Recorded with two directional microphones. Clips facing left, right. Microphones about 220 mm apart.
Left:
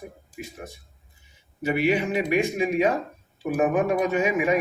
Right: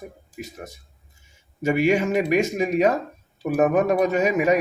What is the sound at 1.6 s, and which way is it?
A man's voice, 45° right (ahead or behind).